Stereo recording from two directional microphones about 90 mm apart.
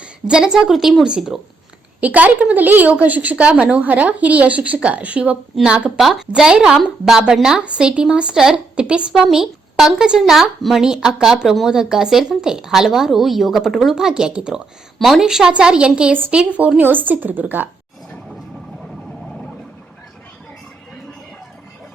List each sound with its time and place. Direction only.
0.0 s a woman's voice: 10° right (ahead or behind)
2.0 s a woman's voice: 20° right (ahead or behind)